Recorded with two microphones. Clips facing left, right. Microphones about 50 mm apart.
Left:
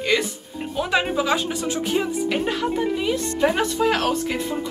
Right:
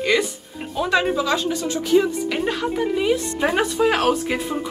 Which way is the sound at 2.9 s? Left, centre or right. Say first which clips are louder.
Right 3 dB; centre.